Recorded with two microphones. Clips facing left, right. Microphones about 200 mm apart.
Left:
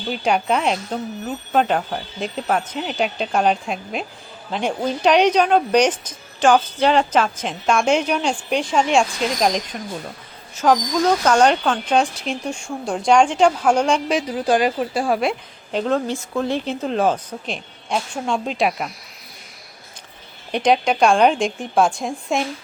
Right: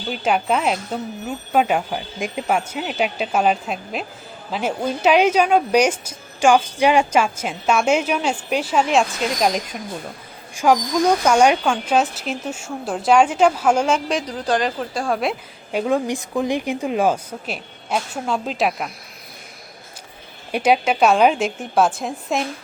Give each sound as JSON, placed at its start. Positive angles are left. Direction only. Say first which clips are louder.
{"t": 0.1, "sound": "speech", "louder": "even", "side_deg": 0}
{"t": 20.5, "sound": "speech", "louder": "even", "side_deg": -5}